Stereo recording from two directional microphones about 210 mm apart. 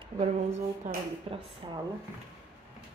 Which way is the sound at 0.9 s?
35° right (ahead or behind).